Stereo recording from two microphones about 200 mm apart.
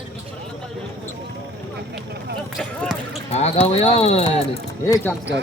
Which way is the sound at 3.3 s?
30° left (ahead or behind).